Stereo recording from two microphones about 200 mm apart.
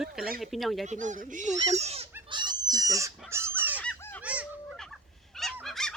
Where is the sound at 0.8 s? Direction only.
35° right (ahead or behind).